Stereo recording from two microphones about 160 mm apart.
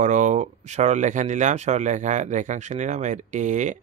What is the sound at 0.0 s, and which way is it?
Speech, 50° right (ahead or behind).